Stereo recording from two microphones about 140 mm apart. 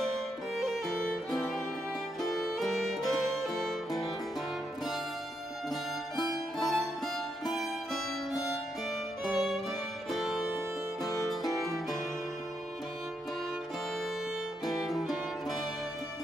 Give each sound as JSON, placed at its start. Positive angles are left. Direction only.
{"t": 0.6, "sound": "violin", "side_deg": 0}
{"t": 2.6, "sound": "music", "side_deg": 0}
{"t": 6.6, "sound": "music", "side_deg": 0}
{"t": 9.2, "sound": "violin", "side_deg": 0}
{"t": 11.0, "sound": "music", "side_deg": 25}
{"t": 11.6, "sound": "music", "side_deg": 0}
{"t": 14.7, "sound": "music", "side_deg": 0}